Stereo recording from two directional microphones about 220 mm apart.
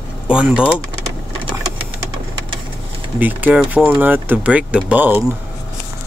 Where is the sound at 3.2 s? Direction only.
10° right (ahead or behind).